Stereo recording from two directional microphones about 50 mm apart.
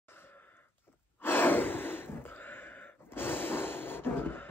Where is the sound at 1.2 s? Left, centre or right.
Left.